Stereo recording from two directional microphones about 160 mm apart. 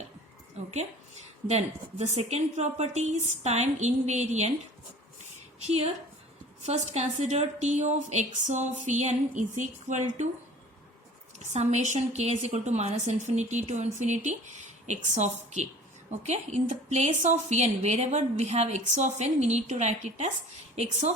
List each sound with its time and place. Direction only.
1.5 s a woman's voice: 45° right (ahead or behind)
5.6 s a woman's voice: 40° right (ahead or behind)
11.3 s a woman's voice: 45° right (ahead or behind)